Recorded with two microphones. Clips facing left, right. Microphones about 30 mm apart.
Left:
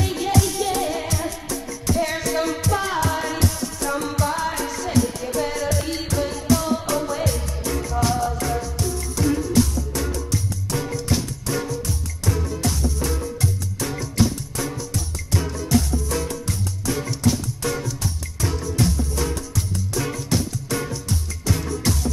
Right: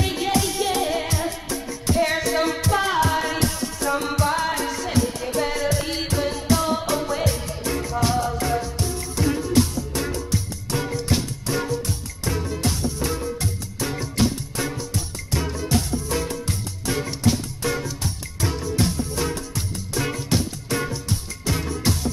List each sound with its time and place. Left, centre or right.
0.0 s music: right
2.1 s music: centre
6.9 s music: centre
8.6 s music: right
9.2 s music: centre
9.5 s music: right
11.4 s music: centre
11.7 s music: right
13.0 s music: centre
15.3 s music: centre
19.5 s music: right